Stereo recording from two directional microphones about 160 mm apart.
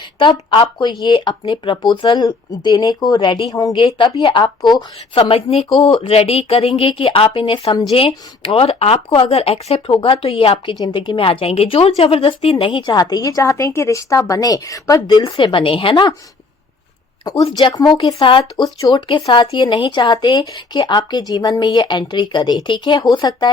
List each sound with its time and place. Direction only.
0.2 s speech: 30° left (ahead or behind)
17.4 s speech: 30° left (ahead or behind)